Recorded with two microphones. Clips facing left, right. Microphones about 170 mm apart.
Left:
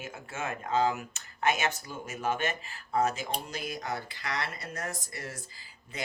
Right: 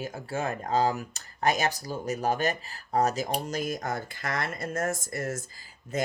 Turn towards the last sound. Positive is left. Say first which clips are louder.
# right 9 dB
turn(degrees=-45)  # may be behind; listen again after turning